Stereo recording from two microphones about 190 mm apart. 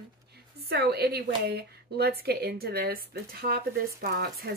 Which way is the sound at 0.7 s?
60° right (ahead or behind).